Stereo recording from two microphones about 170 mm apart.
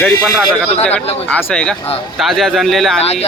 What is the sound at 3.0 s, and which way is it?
Speech, 35° left (ahead or behind).